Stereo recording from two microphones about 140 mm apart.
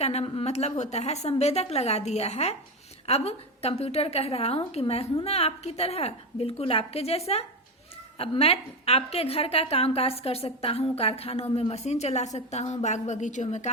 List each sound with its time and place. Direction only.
0.0 s a woman's voice: 50° left (ahead or behind)
8.2 s a woman's voice: 45° left (ahead or behind)